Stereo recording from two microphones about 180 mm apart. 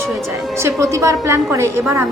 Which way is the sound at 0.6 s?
15° right (ahead or behind).